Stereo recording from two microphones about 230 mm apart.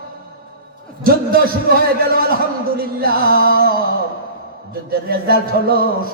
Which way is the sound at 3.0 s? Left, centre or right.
Right.